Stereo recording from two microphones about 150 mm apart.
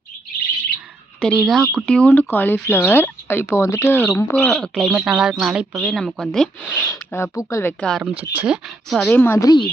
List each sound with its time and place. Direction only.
1.2 s speech: 5° left (ahead or behind)
4.4 s speech: 5° left (ahead or behind)
6.9 s speech: 20° left (ahead or behind)
7.9 s speech: centre (ahead or behind)
8.2 s speech: 10° right (ahead or behind)
8.9 s speech: 5° left (ahead or behind); by 9.6 s 25° left (ahead or behind)